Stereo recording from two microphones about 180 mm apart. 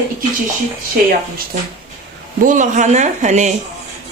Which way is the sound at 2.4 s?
45° right (ahead or behind).